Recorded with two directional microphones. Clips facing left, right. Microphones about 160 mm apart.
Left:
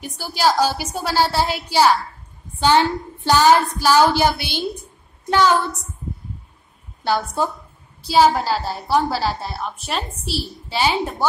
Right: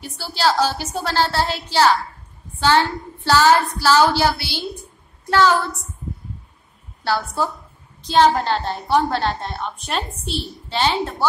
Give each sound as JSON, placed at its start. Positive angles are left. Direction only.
{"t": 0.0, "sound": "child singing", "side_deg": 15}
{"t": 7.0, "sound": "a woman's voice", "side_deg": 20}
{"t": 8.0, "sound": "a woman's voice", "side_deg": 10}